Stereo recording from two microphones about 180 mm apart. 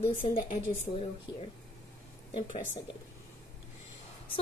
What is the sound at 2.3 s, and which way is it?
Speech, 35° left (ahead or behind).